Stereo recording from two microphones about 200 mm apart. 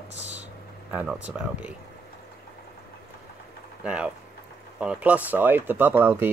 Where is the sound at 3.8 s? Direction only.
5° right (ahead or behind).